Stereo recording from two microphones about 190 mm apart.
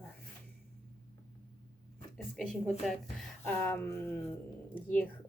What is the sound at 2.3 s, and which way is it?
Speech, centre (ahead or behind).